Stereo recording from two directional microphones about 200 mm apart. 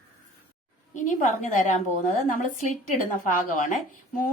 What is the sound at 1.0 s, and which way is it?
Speech, 40° left (ahead or behind).